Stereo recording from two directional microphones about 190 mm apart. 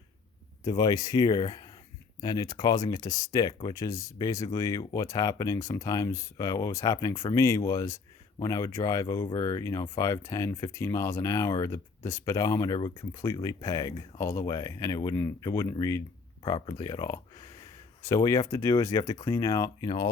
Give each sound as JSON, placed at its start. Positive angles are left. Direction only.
{"t": 0.6, "sound": "speech", "side_deg": 20}